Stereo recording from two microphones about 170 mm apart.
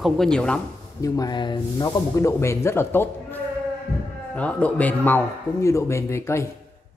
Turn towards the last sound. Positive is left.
turn(degrees=15)  # may be behind; listen again after turning